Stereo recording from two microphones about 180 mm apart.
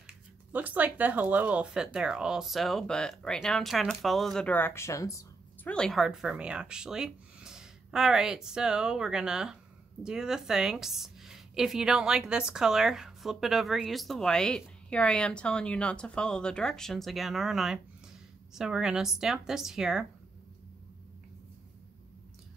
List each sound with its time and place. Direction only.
0.0 s a woman's voice: 10° right (ahead or behind); by 5.7 s 15° left (ahead or behind)
5.7 s a woman's voice: 5° left (ahead or behind)